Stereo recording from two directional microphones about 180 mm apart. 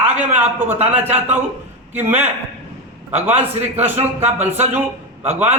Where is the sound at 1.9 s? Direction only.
10° right (ahead or behind).